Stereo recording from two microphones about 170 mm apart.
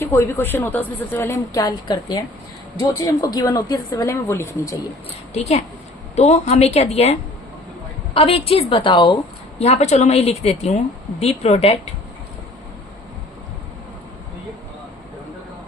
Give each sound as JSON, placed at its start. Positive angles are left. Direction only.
{"t": 0.0, "sound": "a woman's voice", "side_deg": 15}
{"t": 5.3, "sound": "a woman's voice", "side_deg": 40}
{"t": 9.6, "sound": "a woman's voice", "side_deg": 40}